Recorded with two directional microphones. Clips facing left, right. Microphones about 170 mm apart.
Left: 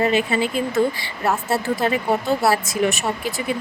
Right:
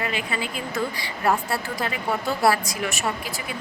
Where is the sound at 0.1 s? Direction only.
25° left (ahead or behind).